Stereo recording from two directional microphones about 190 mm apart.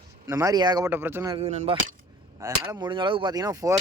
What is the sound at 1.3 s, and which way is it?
Speech, 35° right (ahead or behind).